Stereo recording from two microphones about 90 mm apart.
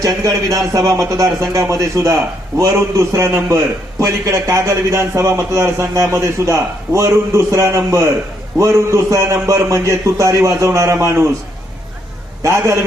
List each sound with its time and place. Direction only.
0.0 s a man's voice: 40° right (ahead or behind)
12.4 s a man's voice: 35° right (ahead or behind)